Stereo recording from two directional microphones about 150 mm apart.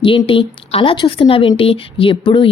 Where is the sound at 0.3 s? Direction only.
40° left (ahead or behind).